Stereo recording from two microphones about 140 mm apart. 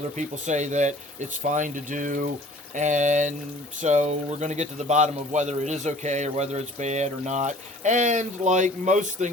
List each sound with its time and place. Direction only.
0.2 s a man's voice: 60° right (ahead or behind)